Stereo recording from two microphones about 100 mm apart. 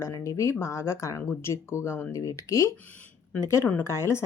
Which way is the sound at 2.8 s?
15° left (ahead or behind).